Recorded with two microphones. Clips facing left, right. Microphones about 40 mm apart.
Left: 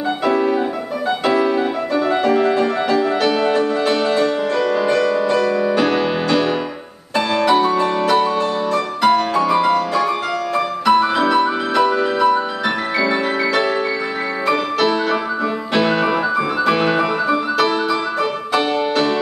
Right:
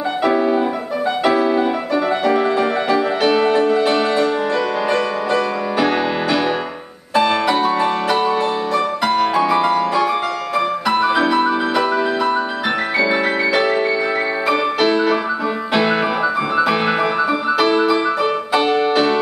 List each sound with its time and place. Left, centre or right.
0.2 s music: centre